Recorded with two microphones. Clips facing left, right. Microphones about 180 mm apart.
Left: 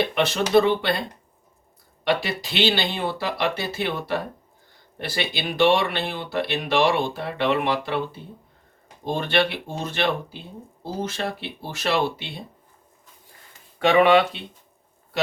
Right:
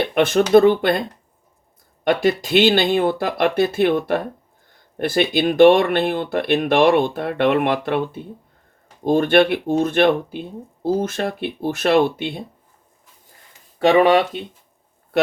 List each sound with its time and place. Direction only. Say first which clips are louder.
0.1 s speech: right 6 dB; 50° right (ahead or behind)
2.0 s speech: right 7 dB; 50° right (ahead or behind)
9.0 s speech: right 8 dB; 50° right (ahead or behind)
13.7 s speech: right 3 dB; 40° right (ahead or behind)